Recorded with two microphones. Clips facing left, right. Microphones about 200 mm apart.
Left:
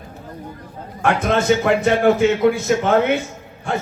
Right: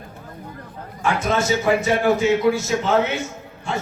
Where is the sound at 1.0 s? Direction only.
55° left (ahead or behind).